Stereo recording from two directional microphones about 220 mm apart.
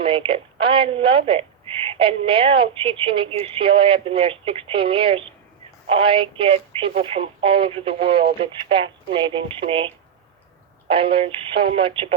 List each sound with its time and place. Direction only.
0.0 s a woman's voice: 25° right (ahead or behind)